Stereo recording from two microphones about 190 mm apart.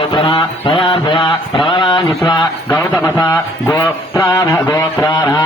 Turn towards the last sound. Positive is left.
turn(degrees=15)  # may be behind; listen again after turning